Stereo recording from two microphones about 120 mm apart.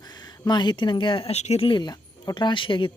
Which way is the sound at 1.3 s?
65° left (ahead or behind).